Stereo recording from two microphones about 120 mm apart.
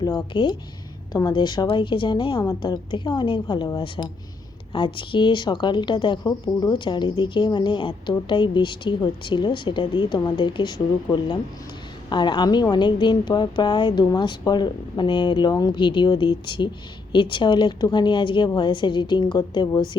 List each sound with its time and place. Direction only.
0.0 s speech: 35° left (ahead or behind)